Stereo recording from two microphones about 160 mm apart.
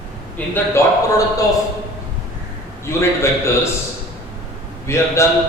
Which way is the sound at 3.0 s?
15° left (ahead or behind).